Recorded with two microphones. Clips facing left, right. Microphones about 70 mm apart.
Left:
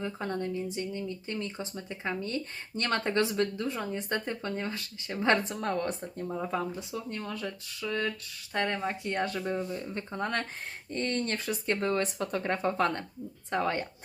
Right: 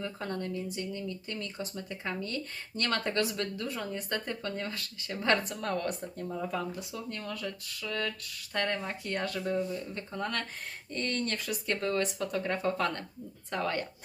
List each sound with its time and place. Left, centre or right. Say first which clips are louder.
0.0 s speech: left 3 dB; left